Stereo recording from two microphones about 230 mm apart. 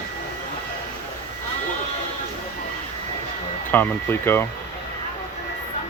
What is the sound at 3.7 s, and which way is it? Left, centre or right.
Speech, centre.